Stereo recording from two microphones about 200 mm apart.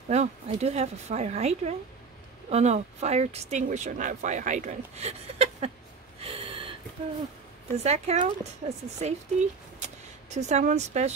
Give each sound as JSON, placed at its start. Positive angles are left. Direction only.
{"t": 0.1, "sound": "speech", "side_deg": -35}
{"t": 6.2, "sound": "a sound", "side_deg": -25}
{"t": 7.7, "sound": "speech", "side_deg": -30}
{"t": 10.3, "sound": "speech", "side_deg": -35}